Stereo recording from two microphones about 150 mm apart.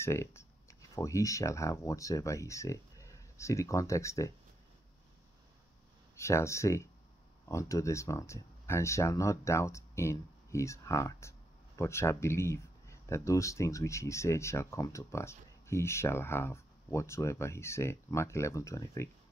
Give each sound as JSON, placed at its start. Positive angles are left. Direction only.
{"t": 0.0, "sound": "speech", "side_deg": 20}
{"t": 6.1, "sound": "speech", "side_deg": 20}